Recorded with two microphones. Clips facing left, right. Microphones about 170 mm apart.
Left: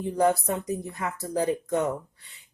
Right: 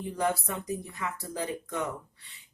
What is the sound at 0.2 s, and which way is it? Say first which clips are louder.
Speech: left 7 dB; 40° left (ahead or behind).